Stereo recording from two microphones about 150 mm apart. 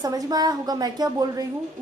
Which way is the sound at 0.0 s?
25° right (ahead or behind).